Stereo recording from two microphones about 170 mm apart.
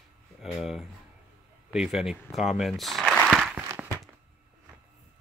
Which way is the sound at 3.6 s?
10° right (ahead or behind).